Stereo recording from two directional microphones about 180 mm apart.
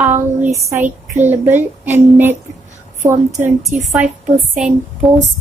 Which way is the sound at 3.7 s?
10° right (ahead or behind).